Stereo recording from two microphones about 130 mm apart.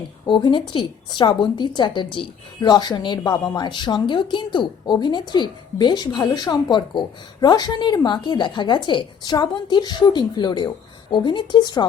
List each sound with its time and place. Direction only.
0.3 s a woman's voice: 40° left (ahead or behind)